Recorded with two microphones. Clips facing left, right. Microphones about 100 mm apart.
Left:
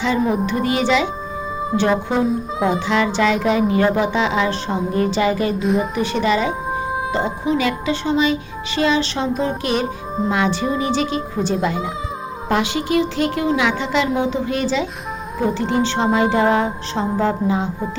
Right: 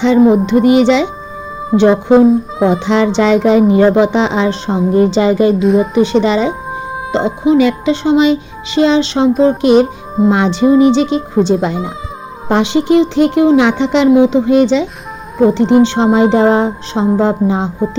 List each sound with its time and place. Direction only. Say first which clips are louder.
0.0 s speech: right 10 dB; 25° right (ahead or behind)
2.2 s speech: right 10 dB; centre (ahead or behind)
2.8 s speech: right 6 dB; 25° right (ahead or behind)
5.6 s speech: right 8 dB; centre (ahead or behind)
5.9 s speech: right 7 dB; 25° right (ahead or behind)